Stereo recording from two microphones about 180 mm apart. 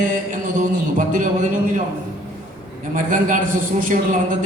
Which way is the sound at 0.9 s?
45° right (ahead or behind).